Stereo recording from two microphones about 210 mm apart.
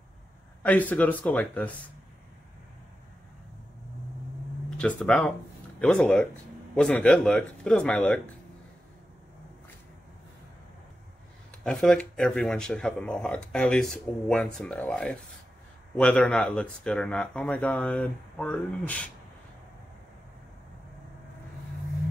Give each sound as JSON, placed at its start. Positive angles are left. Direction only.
{"t": 0.6, "sound": "speech", "side_deg": 5}
{"t": 4.7, "sound": "speech", "side_deg": 5}
{"t": 11.6, "sound": "speech", "side_deg": 5}